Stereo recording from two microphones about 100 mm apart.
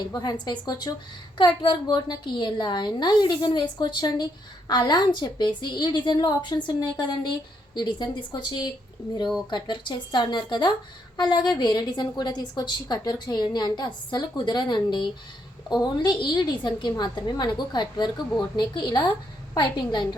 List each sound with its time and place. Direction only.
0.0 s a woman's voice: 45° left (ahead or behind)